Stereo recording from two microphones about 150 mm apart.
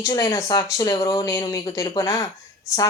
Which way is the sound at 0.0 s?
20° left (ahead or behind).